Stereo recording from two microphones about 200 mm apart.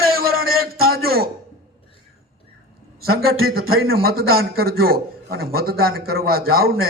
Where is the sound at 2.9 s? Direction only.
50° right (ahead or behind).